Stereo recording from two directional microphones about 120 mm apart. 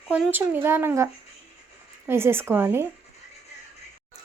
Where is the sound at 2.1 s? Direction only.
20° right (ahead or behind).